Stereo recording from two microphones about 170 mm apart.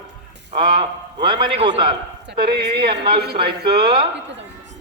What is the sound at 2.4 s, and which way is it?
Speech, 70° right (ahead or behind).